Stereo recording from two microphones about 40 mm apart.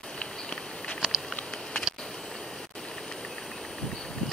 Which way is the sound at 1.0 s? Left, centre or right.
Centre.